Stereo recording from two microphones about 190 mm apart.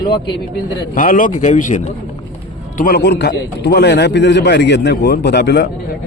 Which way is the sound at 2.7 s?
55° left (ahead or behind).